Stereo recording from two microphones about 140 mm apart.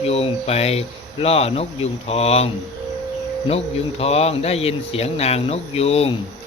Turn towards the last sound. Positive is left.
turn(degrees=45)  # may be behind; listen again after turning